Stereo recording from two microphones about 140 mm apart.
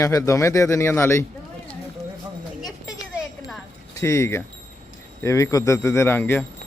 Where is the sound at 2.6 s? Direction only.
5° right (ahead or behind).